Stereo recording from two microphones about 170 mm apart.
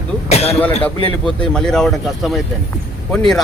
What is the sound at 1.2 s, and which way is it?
Speech, 5° left (ahead or behind).